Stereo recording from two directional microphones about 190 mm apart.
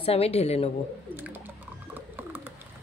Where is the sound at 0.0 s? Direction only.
30° left (ahead or behind).